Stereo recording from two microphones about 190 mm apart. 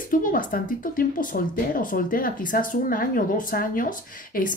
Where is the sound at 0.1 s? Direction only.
45° left (ahead or behind).